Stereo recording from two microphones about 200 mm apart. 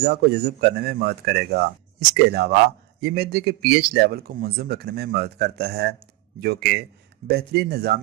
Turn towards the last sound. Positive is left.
turn(degrees=-55)  # may be behind; listen again after turning